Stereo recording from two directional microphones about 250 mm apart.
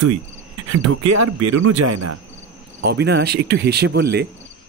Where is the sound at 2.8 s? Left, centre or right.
Right.